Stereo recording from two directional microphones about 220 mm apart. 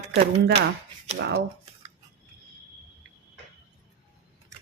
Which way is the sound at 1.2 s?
50° right (ahead or behind).